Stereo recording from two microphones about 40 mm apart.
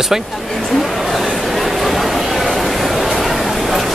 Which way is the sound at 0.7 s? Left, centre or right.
Centre.